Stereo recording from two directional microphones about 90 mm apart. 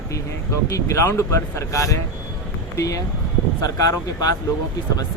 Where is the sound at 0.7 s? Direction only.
35° left (ahead or behind).